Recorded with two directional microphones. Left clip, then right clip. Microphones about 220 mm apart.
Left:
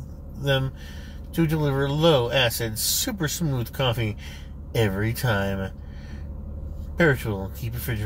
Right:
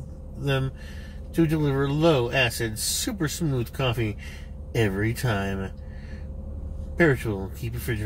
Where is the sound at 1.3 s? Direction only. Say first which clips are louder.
Right 1 dB; 5° left (ahead or behind).